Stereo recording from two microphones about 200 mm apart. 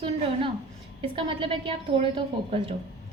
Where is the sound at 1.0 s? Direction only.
25° right (ahead or behind).